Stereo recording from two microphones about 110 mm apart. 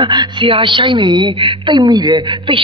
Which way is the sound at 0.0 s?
45° right (ahead or behind).